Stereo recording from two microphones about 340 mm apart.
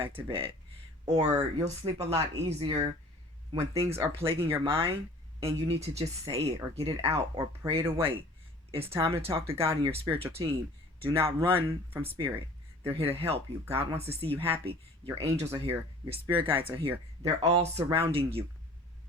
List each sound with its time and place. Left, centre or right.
0.0 s speech: centre